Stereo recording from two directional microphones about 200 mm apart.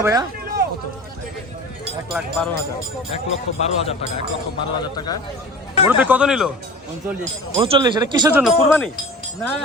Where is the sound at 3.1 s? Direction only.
30° left (ahead or behind).